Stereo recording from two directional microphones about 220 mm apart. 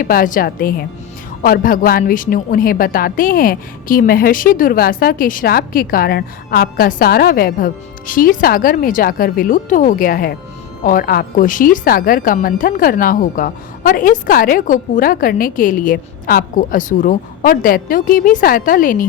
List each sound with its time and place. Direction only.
0.0 s a woman's voice: 40° left (ahead or behind)